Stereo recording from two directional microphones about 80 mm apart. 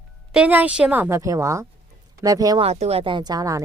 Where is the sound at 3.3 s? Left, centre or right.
Right.